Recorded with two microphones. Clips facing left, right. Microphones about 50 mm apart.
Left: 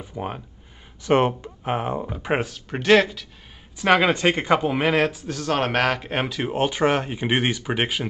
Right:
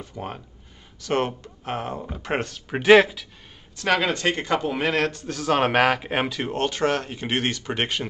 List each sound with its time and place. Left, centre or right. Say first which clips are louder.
0.0 s speech: left 3 dB; centre
1.0 s speech: left 5 dB; left
2.0 s speech: left 3 dB; centre
2.8 s speech: right 3 dB; centre
3.7 s speech: left 4 dB; centre